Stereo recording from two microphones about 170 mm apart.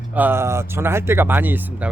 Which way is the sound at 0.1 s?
10° right (ahead or behind).